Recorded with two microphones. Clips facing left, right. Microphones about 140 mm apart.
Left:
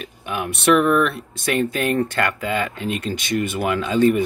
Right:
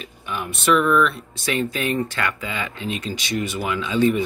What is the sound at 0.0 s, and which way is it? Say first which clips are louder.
Speech: left 3 dB; 60° left (ahead or behind).